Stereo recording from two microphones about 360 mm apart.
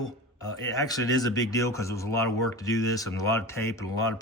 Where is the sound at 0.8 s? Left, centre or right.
Centre.